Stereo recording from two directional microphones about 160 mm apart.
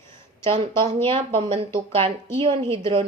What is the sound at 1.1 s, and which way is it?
Speech, 40° right (ahead or behind).